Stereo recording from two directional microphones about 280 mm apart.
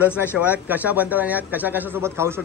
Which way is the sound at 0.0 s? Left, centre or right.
Centre.